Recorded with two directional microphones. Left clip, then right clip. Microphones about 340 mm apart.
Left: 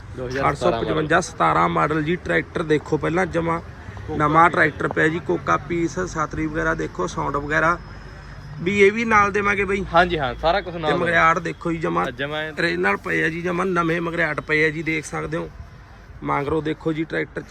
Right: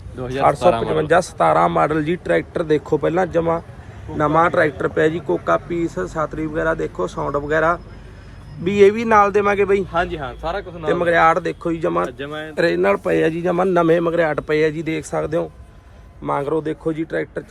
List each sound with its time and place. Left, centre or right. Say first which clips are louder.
0.4 s a man's voice: right 6 dB; centre
0.7 s speech: right 4 dB; right
0.9 s a man's voice: right 3 dB; centre
9.9 s speech: left 4 dB; left
10.8 s a man's voice: right 3 dB; centre
12.1 s speech: left 2 dB; left
12.5 s a man's voice: right 5 dB; centre